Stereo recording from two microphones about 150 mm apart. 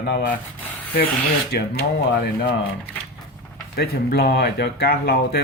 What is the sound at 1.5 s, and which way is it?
Speech, 90° left.